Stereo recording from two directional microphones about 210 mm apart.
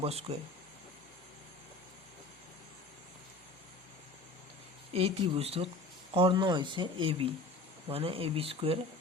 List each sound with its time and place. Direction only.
0.0 s speech: 30° right (ahead or behind)
4.9 s speech: 30° right (ahead or behind)